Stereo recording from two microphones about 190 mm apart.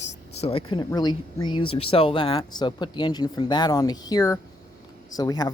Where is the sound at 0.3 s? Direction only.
30° left (ahead or behind).